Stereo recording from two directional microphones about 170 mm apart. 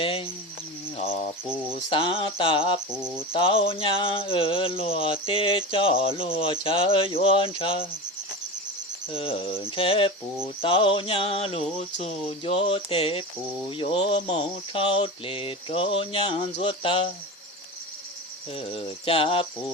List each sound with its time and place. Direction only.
0.0 s insect: 30° left (ahead or behind)
0.9 s a sound: 35° left (ahead or behind)
1.7 s cricket: 30° left (ahead or behind)
9.0 s cricket: 30° left (ahead or behind)
13.7 s a sound: 30° left (ahead or behind)
18.5 s cricket: 35° left (ahead or behind)